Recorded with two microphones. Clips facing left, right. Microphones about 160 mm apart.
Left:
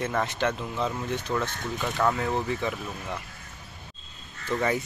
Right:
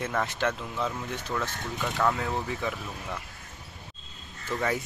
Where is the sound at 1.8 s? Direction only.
Centre (ahead or behind).